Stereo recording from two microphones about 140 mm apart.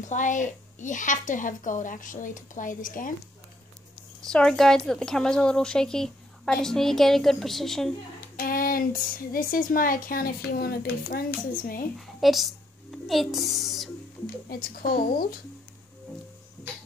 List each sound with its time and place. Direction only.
0.0 s a woman's voice: 65° left (ahead or behind)
4.2 s a woman's voice: 5° left (ahead or behind)
8.4 s speech: 90° left
12.2 s a woman's voice: centre (ahead or behind)
14.5 s speech: 90° left